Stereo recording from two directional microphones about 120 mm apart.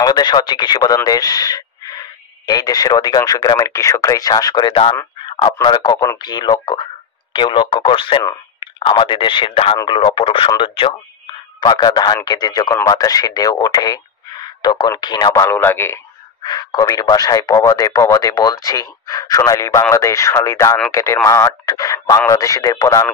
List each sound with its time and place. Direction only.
0.0 s speech: 35° left (ahead or behind)
11.6 s speech: 35° left (ahead or behind)
15.4 s speech: 15° left (ahead or behind)
16.4 s speech: 35° left (ahead or behind)